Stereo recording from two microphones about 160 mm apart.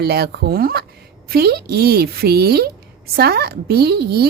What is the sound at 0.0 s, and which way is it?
A woman's voice, 85° right.